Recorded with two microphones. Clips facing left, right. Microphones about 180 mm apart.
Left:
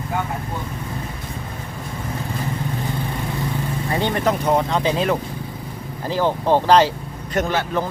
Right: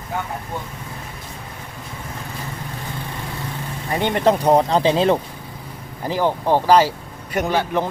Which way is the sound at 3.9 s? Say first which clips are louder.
Right 2 dB; 20° right (ahead or behind).